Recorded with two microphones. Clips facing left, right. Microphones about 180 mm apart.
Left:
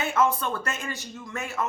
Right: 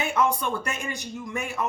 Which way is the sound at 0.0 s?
15° right (ahead or behind).